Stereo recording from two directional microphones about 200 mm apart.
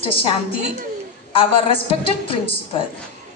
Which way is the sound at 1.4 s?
25° left (ahead or behind).